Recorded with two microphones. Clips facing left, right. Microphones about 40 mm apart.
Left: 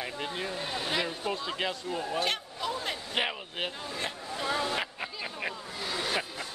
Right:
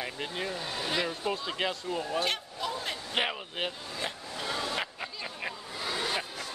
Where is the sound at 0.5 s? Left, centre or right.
Centre.